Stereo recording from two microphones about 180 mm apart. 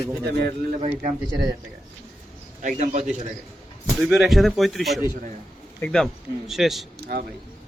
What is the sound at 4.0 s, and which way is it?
Speech, centre (ahead or behind).